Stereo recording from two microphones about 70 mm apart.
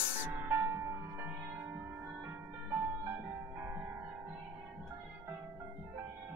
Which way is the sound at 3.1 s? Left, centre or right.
Right.